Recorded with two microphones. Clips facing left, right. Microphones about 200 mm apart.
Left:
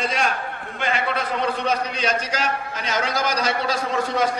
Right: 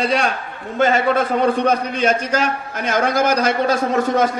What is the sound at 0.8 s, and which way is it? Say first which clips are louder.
A man's voice: right 9 dB; 45° right (ahead or behind).